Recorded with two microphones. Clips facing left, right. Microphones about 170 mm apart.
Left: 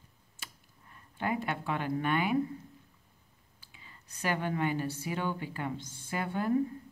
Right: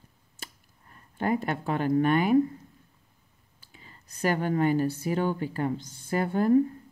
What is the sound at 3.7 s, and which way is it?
A woman's voice, 40° right (ahead or behind).